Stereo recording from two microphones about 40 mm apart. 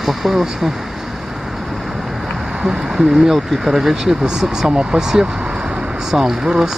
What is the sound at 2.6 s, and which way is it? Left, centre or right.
Speech, centre.